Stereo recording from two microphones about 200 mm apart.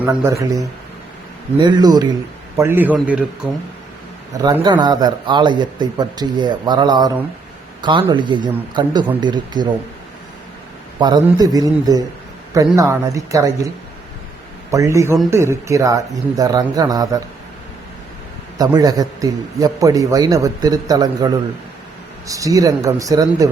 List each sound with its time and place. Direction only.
0.0 s a man's voice: 10° right (ahead or behind)
4.4 s a man's voice: 20° right (ahead or behind)
11.0 s a man's voice: 20° right (ahead or behind)
14.7 s speech: 15° right (ahead or behind)
18.5 s a man's voice: 20° right (ahead or behind)